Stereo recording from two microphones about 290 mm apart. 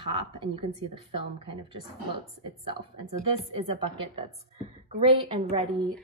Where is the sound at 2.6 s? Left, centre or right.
Centre.